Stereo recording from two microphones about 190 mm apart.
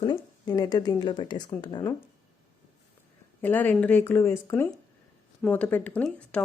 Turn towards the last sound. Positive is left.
turn(degrees=5)  # may be behind; listen again after turning